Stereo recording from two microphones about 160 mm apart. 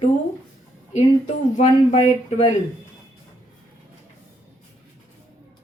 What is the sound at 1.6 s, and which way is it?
Speech, 50° left (ahead or behind).